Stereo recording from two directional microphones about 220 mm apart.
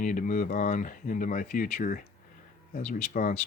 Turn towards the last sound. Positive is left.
turn(degrees=35)  # may be behind; listen again after turning